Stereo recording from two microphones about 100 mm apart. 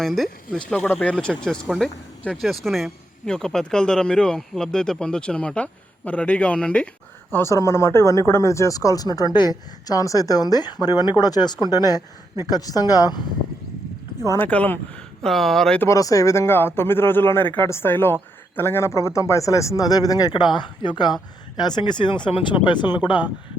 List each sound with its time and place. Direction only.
0.0 s speech: 5° left (ahead or behind)
7.3 s speech: 20° left (ahead or behind); by 13.2 s 40° left (ahead or behind)
14.3 s speech: 20° left (ahead or behind); by 15.8 s 5° left (ahead or behind)
15.8 s speech: 35° left (ahead or behind)
20.3 s speech: 50° left (ahead or behind)